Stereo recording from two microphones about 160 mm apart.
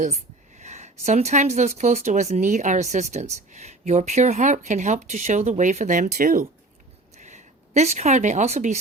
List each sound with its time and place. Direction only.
0.0 s speech: 45° right (ahead or behind)
7.2 s speech: 50° right (ahead or behind)